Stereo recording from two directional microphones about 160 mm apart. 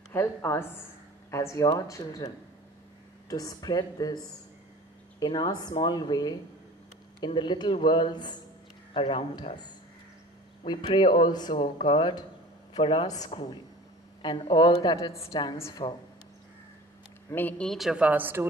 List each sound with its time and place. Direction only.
0.1 s a woman's voice: 15° left (ahead or behind)
10.6 s a woman's voice: 30° left (ahead or behind)
17.3 s a woman's voice: 10° left (ahead or behind); by 18.5 s 15° right (ahead or behind)